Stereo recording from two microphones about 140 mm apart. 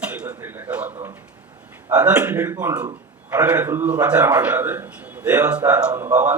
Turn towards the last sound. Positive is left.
turn(degrees=-10)  # may be behind; listen again after turning